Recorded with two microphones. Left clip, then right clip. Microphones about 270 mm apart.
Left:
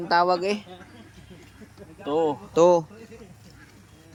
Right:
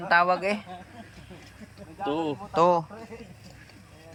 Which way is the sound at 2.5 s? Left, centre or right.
Centre.